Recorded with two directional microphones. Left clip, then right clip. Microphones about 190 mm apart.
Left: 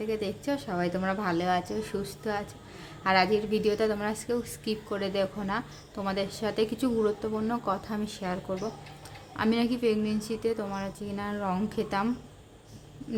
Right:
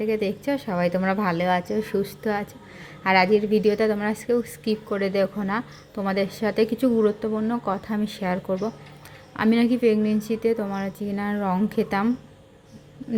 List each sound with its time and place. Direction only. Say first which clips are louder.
0.0 s a woman's voice: right 7 dB; 15° right (ahead or behind)